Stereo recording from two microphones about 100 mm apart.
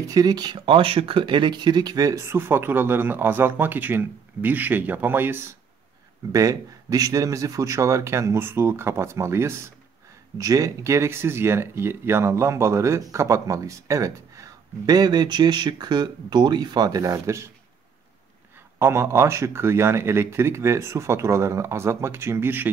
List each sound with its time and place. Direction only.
0.1 s speech: 40° right (ahead or behind)
0.7 s speech: 70° right (ahead or behind); by 5.6 s 25° right (ahead or behind)
6.3 s speech: 35° right (ahead or behind)
18.8 s speech: 25° right (ahead or behind)